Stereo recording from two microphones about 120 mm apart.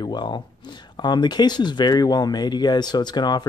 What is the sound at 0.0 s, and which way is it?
Speech, 40° left (ahead or behind).